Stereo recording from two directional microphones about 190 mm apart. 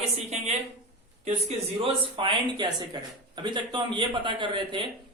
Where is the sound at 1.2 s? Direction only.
30° right (ahead or behind).